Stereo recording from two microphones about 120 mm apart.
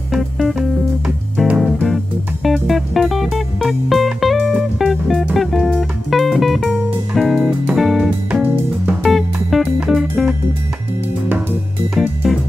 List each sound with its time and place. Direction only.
0.1 s music: centre (ahead or behind)
8.3 s music: 10° right (ahead or behind)
9.0 s music: centre (ahead or behind)
11.9 s music: centre (ahead or behind)